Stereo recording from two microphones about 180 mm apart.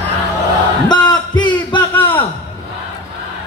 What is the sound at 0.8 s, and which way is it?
Battle cry, 25° left (ahead or behind).